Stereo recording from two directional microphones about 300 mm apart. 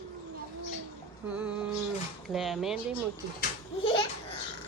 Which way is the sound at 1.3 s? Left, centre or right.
Centre.